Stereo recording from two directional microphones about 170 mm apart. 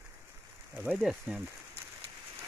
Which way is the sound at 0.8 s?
5° right (ahead or behind).